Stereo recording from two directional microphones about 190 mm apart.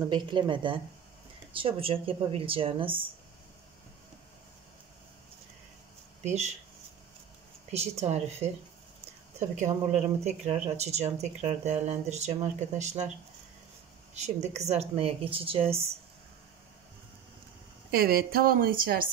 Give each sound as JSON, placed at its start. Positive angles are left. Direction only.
{"t": 0.0, "sound": "speech", "side_deg": -25}
{"t": 6.2, "sound": "speech", "side_deg": -35}
{"t": 7.7, "sound": "speech", "side_deg": -35}
{"t": 9.6, "sound": "speech", "side_deg": -35}
{"t": 14.1, "sound": "speech", "side_deg": -35}
{"t": 17.9, "sound": "a woman's voice", "side_deg": -55}